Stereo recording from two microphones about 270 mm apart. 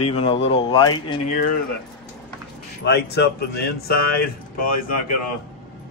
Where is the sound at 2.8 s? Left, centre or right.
Left.